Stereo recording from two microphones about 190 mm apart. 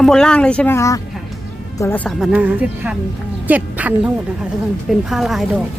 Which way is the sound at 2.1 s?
5° right (ahead or behind).